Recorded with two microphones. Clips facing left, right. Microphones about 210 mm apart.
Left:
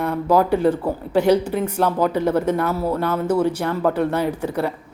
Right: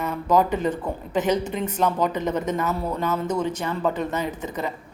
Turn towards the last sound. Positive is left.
turn(degrees=10)  # may be behind; listen again after turning